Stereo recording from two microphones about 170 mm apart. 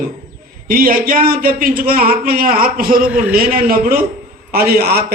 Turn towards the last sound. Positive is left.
turn(degrees=-65)  # may be behind; listen again after turning